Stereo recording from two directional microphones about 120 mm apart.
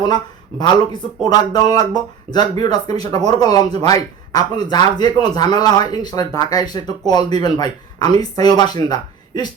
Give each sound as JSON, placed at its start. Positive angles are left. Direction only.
{"t": 1.2, "sound": "speech", "side_deg": 35}